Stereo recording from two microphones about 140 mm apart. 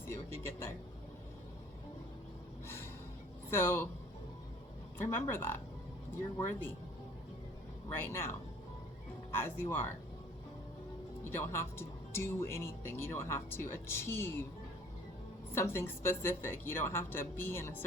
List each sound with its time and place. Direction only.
0.1 s a sound: 20° left (ahead or behind)
2.6 s gasp: 15° left (ahead or behind)
3.5 s a woman's voice: 15° left (ahead or behind)
4.9 s a woman's voice: 15° left (ahead or behind)
7.9 s a woman's voice: 15° left (ahead or behind)
11.2 s speech: 15° left (ahead or behind)
15.5 s a woman's voice: 15° left (ahead or behind)